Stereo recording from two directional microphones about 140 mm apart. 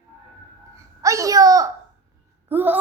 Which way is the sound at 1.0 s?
25° right (ahead or behind).